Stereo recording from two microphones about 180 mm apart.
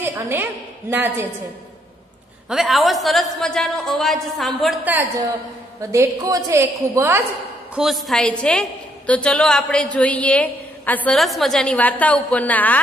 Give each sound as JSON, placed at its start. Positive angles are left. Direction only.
{"t": 0.0, "sound": "a woman's voice", "side_deg": -10}
{"t": 2.5, "sound": "a woman's voice", "side_deg": 0}
{"t": 5.8, "sound": "a woman's voice", "side_deg": -15}
{"t": 7.7, "sound": "a woman's voice", "side_deg": 0}